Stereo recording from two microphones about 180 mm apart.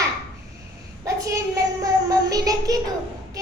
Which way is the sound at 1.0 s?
15° right (ahead or behind).